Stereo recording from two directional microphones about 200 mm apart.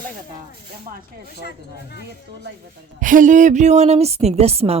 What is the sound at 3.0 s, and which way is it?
A woman's voice, 40° right (ahead or behind).